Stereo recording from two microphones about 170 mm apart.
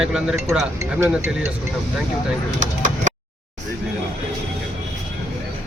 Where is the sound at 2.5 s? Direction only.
50° right (ahead or behind).